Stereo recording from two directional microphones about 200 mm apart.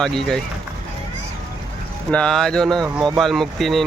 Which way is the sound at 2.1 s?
5° left (ahead or behind).